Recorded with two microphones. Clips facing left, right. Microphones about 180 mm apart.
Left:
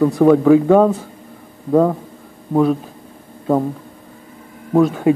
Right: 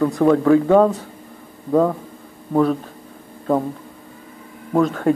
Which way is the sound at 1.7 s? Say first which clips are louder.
Left 3 dB; 15° left (ahead or behind).